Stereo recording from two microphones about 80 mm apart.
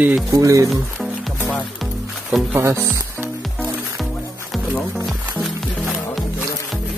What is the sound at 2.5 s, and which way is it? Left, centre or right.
Speech, right.